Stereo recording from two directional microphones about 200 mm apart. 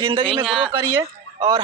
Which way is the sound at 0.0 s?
25° right (ahead or behind).